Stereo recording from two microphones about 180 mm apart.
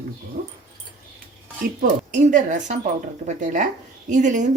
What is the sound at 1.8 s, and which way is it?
Speech, 45° right (ahead or behind).